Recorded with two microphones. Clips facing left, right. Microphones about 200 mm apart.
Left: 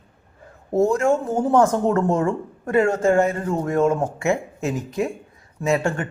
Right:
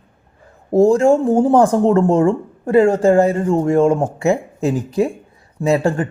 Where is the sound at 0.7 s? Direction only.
30° right (ahead or behind).